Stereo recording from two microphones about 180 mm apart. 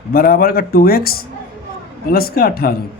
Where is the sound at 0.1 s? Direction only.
55° left (ahead or behind).